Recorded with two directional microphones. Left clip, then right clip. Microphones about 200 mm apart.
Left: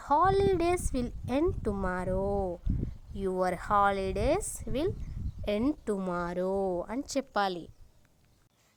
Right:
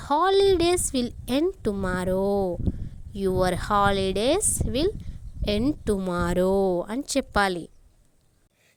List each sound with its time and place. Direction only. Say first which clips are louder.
0.0 s a woman's voice: right 5 dB; 30° right (ahead or behind)